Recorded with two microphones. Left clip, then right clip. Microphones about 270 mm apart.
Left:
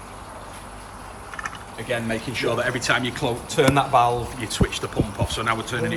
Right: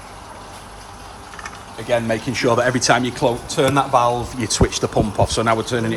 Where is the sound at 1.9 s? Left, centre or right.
Right.